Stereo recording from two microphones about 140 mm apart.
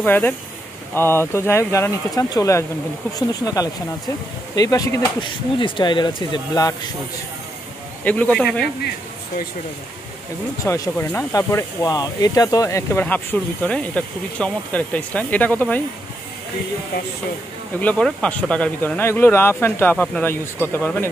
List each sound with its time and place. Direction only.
0.0 s speech: 15° left (ahead or behind); by 6.9 s 30° left (ahead or behind)
8.0 s speech: 10° left (ahead or behind)
10.6 s speech: 20° left (ahead or behind)
17.7 s speech: 5° left (ahead or behind)